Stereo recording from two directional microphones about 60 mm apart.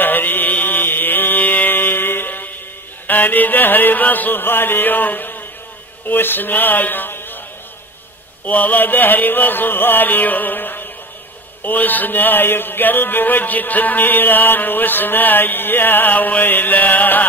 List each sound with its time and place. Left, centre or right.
0.0 s mantra: left
3.1 s music: left
8.5 s music: left